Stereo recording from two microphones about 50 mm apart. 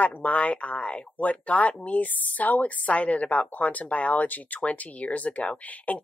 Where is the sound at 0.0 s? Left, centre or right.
Left.